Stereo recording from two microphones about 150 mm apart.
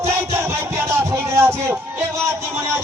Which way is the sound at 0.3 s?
15° right (ahead or behind).